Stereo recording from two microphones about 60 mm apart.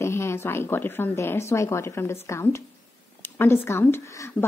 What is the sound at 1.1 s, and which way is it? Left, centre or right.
A woman's voice, left.